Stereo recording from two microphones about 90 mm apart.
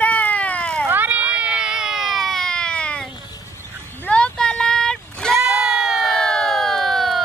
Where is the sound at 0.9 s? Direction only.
20° right (ahead or behind); by 5.3 s 5° left (ahead or behind).